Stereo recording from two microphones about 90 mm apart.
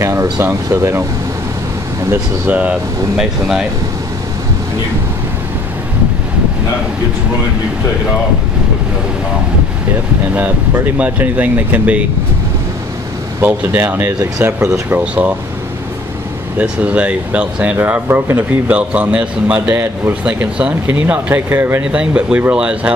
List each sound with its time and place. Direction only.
0.0 s a sound: 30° right (ahead or behind)
0.7 s speech: 30° right (ahead or behind)
2.4 s speech: 15° right (ahead or behind)
10.3 s speech: 15° right (ahead or behind)
13.4 s speech: 25° right (ahead or behind)
16.5 s speech: 15° right (ahead or behind)
19.7 s speech: 30° right (ahead or behind)
20.2 s speech: 15° right (ahead or behind)
21.9 s speech: 15° right (ahead or behind)